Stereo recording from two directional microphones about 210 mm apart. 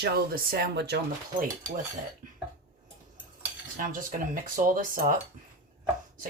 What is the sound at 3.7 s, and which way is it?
Speech, 40° right (ahead or behind).